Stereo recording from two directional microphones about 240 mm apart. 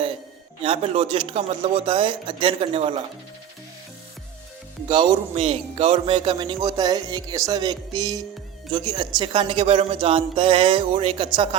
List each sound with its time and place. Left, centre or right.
0.6 s speech: right
4.9 s a man's voice: right